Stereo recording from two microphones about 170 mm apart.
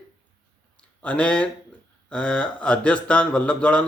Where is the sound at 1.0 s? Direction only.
5° left (ahead or behind).